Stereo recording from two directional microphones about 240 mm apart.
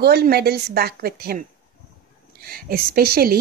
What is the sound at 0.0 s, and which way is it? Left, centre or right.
A woman's voice, right.